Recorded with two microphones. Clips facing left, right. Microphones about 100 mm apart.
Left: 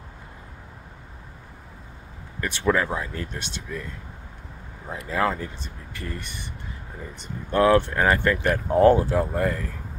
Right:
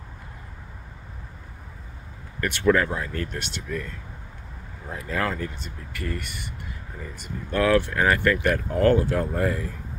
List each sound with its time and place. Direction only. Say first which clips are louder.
2.4 s speech: right 2 dB; 15° left (ahead or behind)
9.2 s speech: left 1 dB; centre (ahead or behind)